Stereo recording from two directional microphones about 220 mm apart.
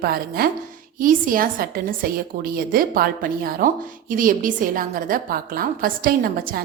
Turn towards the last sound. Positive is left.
turn(degrees=-40)  # may be behind; listen again after turning